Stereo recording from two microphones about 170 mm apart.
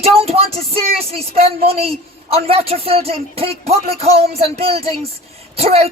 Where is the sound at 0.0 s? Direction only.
35° right (ahead or behind).